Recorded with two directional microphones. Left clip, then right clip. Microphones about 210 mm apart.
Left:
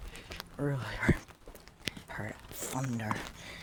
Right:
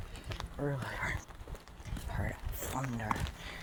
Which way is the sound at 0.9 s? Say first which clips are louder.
Left 5 dB; 45° left (ahead or behind).